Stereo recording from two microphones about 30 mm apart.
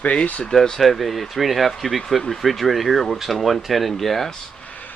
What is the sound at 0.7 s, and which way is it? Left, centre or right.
Speech, centre.